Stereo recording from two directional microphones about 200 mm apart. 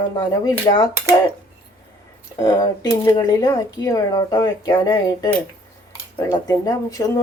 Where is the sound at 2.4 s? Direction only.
20° left (ahead or behind).